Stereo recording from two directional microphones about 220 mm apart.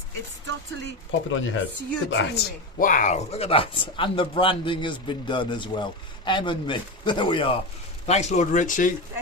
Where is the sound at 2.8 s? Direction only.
35° left (ahead or behind).